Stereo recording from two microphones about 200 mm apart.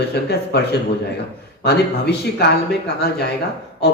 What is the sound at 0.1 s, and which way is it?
Speech, 55° left (ahead or behind).